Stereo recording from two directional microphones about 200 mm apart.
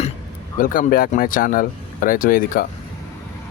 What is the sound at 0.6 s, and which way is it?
Speech, 45° left (ahead or behind).